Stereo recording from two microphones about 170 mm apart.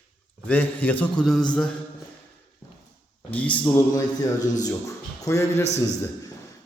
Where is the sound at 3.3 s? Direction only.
10° left (ahead or behind).